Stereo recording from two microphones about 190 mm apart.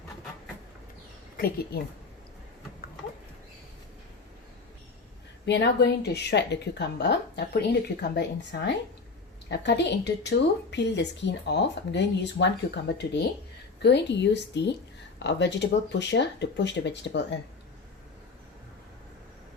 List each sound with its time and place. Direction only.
1.4 s a woman's voice: 55° left (ahead or behind)
5.5 s a woman's voice: 65° left (ahead or behind)